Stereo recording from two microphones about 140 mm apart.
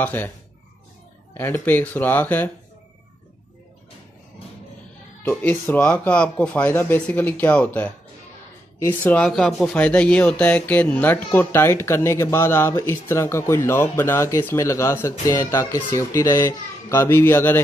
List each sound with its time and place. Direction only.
0.0 s speech: 15° left (ahead or behind)
1.3 s speech: 15° left (ahead or behind)
5.2 s speech: 10° left (ahead or behind)